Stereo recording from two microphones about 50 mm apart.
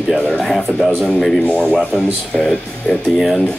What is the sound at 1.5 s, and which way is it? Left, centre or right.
Speech, left.